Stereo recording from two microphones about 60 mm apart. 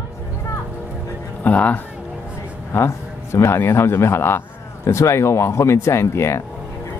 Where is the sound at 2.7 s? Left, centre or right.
Left.